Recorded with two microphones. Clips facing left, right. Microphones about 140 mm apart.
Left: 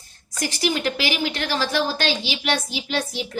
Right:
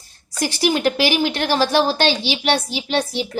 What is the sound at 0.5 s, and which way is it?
A woman's voice, 40° right (ahead or behind).